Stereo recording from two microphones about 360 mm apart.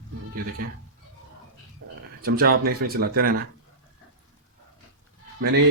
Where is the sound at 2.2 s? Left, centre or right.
Right.